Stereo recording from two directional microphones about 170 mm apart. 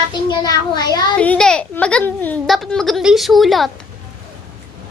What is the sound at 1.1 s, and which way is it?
A child's voice, 5° left (ahead or behind).